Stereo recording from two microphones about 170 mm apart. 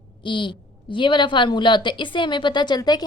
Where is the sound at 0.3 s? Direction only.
30° left (ahead or behind).